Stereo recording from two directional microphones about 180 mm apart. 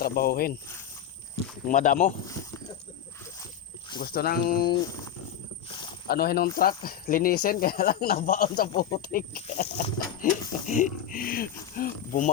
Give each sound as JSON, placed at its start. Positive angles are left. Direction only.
{"t": 0.0, "sound": "speech", "side_deg": 55}
{"t": 1.6, "sound": "speech", "side_deg": 50}
{"t": 4.0, "sound": "speech", "side_deg": 55}
{"t": 5.6, "sound": "a sound", "side_deg": 25}
{"t": 6.1, "sound": "speech", "side_deg": 60}